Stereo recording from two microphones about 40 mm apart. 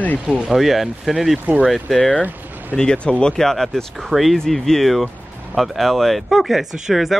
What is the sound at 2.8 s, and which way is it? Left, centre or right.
Speech, left.